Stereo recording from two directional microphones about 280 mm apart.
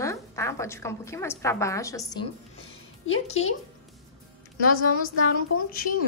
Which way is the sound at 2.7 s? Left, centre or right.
Left.